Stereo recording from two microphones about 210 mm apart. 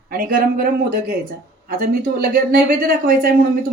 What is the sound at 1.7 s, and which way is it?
Speech, 45° right (ahead or behind).